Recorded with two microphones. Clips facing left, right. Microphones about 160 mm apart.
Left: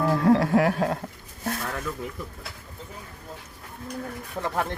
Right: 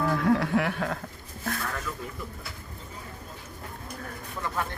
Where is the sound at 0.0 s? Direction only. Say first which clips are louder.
Left 4 dB; 35° left (ahead or behind).